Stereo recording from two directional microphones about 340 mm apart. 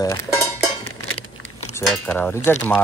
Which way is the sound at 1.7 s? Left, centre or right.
Centre.